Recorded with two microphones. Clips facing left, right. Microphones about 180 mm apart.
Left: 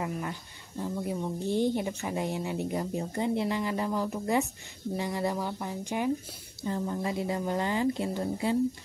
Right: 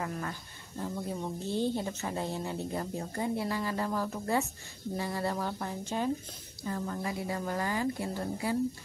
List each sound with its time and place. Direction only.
0.0 s speech: 15° left (ahead or behind)